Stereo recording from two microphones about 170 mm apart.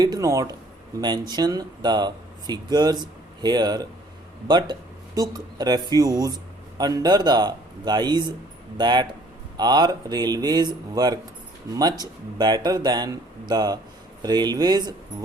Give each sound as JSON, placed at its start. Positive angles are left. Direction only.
{"t": 0.0, "sound": "speech", "side_deg": -20}